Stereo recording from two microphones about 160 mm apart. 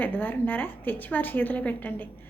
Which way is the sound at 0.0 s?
10° left (ahead or behind).